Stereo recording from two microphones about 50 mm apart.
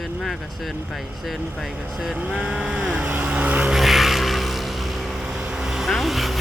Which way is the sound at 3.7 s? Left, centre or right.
Centre.